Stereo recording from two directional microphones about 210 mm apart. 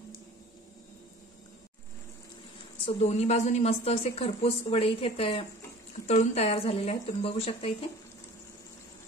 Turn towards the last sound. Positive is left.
turn(degrees=25)  # may be behind; listen again after turning